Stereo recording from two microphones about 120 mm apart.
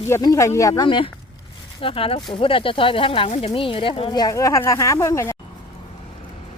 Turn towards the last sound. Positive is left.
turn(degrees=25)  # may be behind; listen again after turning